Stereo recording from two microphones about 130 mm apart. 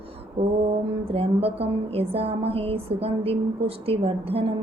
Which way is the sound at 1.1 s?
50° right (ahead or behind).